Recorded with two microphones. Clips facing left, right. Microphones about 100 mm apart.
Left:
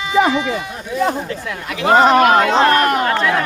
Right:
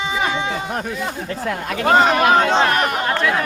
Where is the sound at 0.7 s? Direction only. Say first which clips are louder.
Right 4 dB; 70° right (ahead or behind).